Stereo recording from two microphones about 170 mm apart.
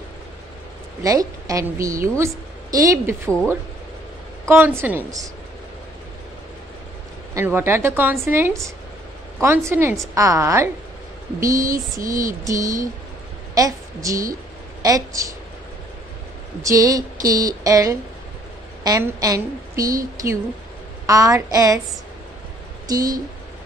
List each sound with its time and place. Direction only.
1.0 s a woman's voice: 20° right (ahead or behind)
4.5 s a woman's voice: 15° right (ahead or behind)
7.3 s a woman's voice: 15° right (ahead or behind)
16.6 s a woman's voice: 20° right (ahead or behind)
22.8 s a woman's voice: 20° right (ahead or behind)